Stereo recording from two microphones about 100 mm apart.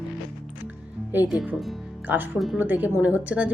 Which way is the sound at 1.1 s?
20° right (ahead or behind).